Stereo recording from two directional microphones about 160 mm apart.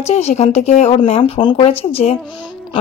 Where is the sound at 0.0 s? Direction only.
40° left (ahead or behind).